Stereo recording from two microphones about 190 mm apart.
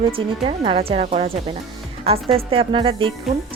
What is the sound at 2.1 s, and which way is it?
A woman's voice, 30° right (ahead or behind).